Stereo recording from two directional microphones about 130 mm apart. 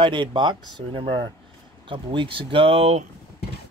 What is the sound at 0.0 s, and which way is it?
Speech, 40° right (ahead or behind).